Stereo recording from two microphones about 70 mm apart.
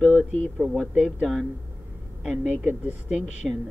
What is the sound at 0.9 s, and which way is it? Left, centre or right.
Speech, centre.